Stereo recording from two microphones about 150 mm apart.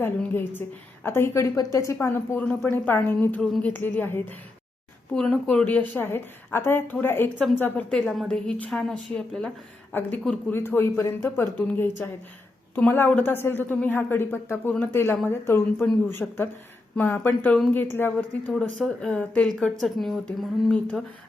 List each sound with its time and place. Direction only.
0.0 s a woman's voice: 15° left (ahead or behind)